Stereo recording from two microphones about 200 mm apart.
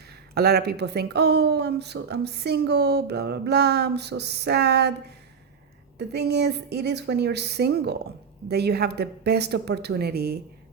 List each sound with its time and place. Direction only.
0.3 s speech: 55° right (ahead or behind)
6.0 s a woman's voice: 55° right (ahead or behind)